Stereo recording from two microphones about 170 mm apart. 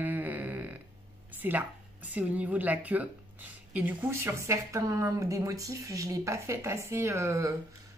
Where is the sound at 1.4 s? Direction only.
10° right (ahead or behind).